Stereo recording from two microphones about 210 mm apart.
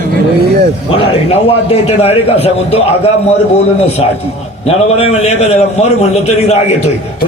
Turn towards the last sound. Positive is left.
turn(degrees=30)  # may be behind; listen again after turning